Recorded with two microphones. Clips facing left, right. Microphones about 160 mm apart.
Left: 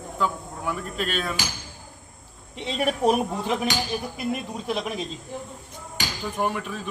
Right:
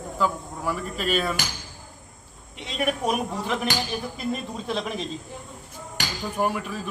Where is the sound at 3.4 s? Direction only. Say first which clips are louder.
Left 1 dB; 15° left (ahead or behind).